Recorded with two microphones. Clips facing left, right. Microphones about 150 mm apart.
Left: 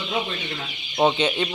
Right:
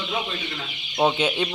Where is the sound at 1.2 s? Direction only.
5° right (ahead or behind).